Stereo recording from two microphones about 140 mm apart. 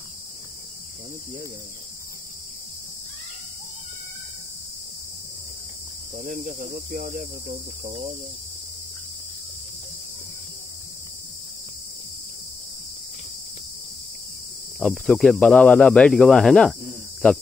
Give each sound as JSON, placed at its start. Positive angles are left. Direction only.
{"t": 6.1, "sound": "speech", "side_deg": -80}
{"t": 14.8, "sound": "speech", "side_deg": 0}